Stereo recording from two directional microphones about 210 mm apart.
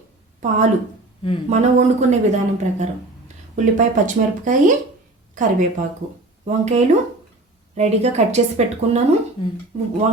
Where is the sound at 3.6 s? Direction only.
35° right (ahead or behind).